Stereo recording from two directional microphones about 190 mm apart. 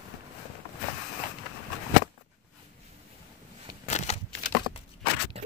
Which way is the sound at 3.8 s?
35° left (ahead or behind).